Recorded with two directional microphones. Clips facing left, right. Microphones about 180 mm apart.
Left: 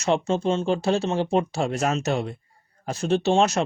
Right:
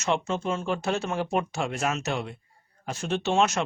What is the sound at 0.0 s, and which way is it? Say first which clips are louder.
Speech: left 5 dB; 35° left (ahead or behind).